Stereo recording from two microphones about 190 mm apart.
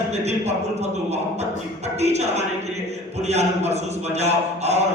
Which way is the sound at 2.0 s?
35° right (ahead or behind).